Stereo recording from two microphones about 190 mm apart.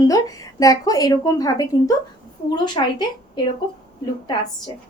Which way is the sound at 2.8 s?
25° left (ahead or behind).